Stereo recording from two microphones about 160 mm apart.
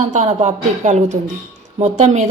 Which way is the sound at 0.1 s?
45° right (ahead or behind).